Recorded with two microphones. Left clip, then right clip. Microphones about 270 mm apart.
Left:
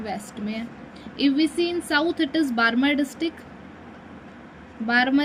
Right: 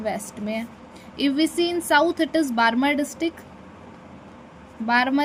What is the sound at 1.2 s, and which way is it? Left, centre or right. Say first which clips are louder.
Speech: even; right.